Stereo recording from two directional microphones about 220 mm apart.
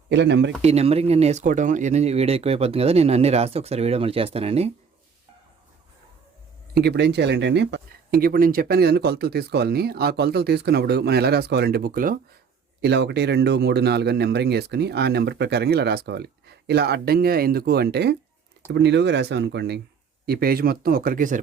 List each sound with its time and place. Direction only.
0.1 s speech: 50° right (ahead or behind)
0.6 s speech: 30° right (ahead or behind)
6.7 s speech: 50° right (ahead or behind)
12.8 s speech: 50° right (ahead or behind)